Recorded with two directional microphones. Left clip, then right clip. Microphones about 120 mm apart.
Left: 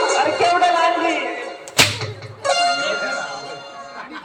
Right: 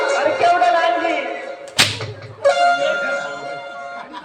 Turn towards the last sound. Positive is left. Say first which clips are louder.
# right 2 dB
turn(degrees=-30)  # may be behind; listen again after turning